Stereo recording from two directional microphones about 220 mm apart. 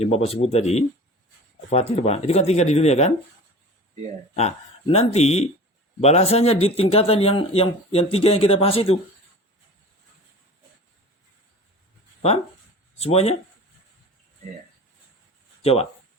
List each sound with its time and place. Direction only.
0.0 s speech: 25° left (ahead or behind)
4.4 s speech: 30° left (ahead or behind)
13.0 s speech: 30° left (ahead or behind)
15.6 s speech: 25° left (ahead or behind)